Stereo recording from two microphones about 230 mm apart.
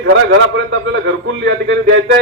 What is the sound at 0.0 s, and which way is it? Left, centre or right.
A man's voice, right.